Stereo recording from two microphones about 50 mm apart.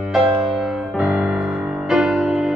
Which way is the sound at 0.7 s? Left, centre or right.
Centre.